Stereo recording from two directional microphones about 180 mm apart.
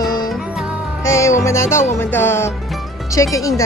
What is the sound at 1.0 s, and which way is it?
Music, 15° left (ahead or behind).